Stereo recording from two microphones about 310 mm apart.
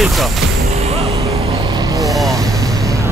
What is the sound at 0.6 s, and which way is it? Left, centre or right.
Vehicle, centre.